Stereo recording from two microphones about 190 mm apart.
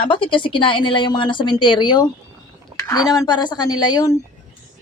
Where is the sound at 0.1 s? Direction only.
25° left (ahead or behind).